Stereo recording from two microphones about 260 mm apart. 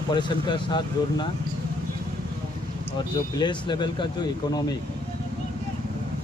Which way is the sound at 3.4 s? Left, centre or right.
Centre.